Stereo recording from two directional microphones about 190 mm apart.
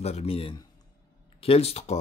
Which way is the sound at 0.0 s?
35° left (ahead or behind).